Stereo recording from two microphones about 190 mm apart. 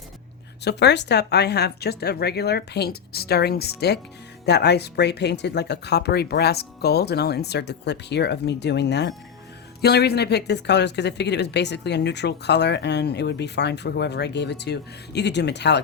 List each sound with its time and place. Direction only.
0.6 s speech: 60° left (ahead or behind)